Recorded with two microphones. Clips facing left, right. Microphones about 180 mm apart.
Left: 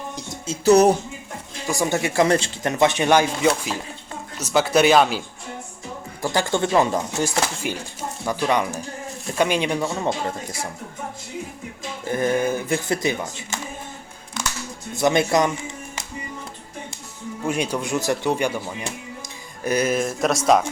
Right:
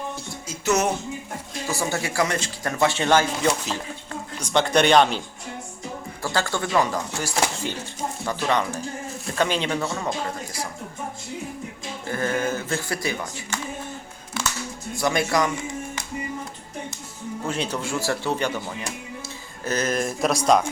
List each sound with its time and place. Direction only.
0.4 s music: 35° left (ahead or behind)
1.6 s speech: 15° left (ahead or behind)
2.2 s speech: 30° left (ahead or behind); by 5.2 s 5° left (ahead or behind)
6.2 s speech: 20° left (ahead or behind)
7.6 s speech: 15° left (ahead or behind)
12.1 s speech: 15° left (ahead or behind)
14.9 s speech: 20° left (ahead or behind)
17.4 s speech: 15° left (ahead or behind)